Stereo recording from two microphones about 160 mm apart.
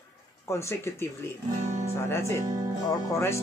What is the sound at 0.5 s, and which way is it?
Speech, 15° left (ahead or behind).